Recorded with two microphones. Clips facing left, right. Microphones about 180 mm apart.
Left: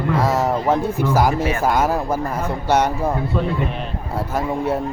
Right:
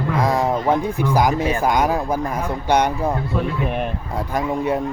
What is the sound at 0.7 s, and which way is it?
Speech, 15° right (ahead or behind).